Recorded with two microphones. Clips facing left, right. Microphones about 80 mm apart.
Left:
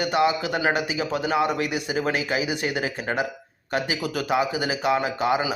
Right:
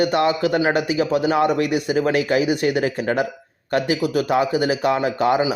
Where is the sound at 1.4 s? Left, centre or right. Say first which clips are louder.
Right 5 dB; right.